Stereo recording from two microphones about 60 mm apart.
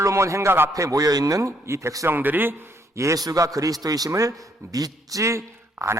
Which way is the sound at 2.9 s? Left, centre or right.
Right.